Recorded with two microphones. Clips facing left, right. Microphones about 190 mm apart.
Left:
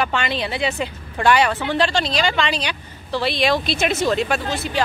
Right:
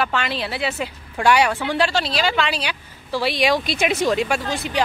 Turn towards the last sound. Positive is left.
turn(degrees=-15)  # may be behind; listen again after turning